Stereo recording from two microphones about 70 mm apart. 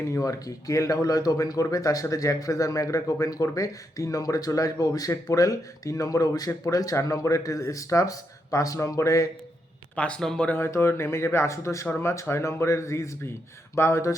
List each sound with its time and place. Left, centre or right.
0.1 s speech: left
9.9 s speech: centre
10.7 s speech: left